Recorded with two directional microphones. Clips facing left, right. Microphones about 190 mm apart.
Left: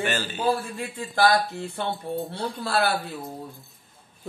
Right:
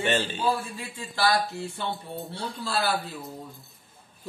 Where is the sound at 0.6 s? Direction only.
55° left (ahead or behind).